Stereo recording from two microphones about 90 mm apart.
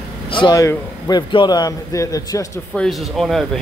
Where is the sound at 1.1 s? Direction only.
60° left (ahead or behind); by 2.4 s 40° left (ahead or behind).